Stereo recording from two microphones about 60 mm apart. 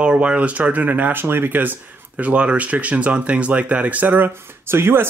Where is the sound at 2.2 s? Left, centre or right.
Right.